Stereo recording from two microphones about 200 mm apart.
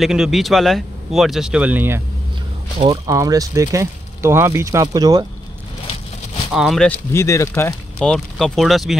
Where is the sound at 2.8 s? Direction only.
20° right (ahead or behind).